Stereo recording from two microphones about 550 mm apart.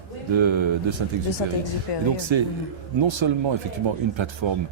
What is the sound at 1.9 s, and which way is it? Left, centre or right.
Speech, left.